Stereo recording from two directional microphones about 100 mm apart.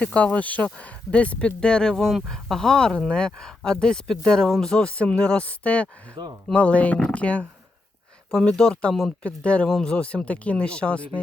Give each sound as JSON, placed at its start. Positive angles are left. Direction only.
{"t": 0.0, "sound": "speech", "side_deg": 15}
{"t": 6.2, "sound": "speech", "side_deg": -45}
{"t": 6.5, "sound": "speech", "side_deg": 15}